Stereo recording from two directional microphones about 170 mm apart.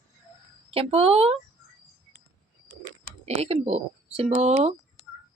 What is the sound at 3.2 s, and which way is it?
Speech, 40° right (ahead or behind).